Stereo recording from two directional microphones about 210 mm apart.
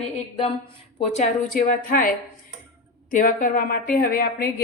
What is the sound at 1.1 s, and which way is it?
A woman's voice, 35° left (ahead or behind).